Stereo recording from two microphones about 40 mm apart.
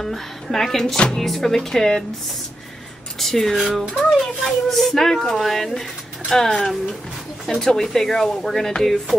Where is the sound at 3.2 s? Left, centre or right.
Centre.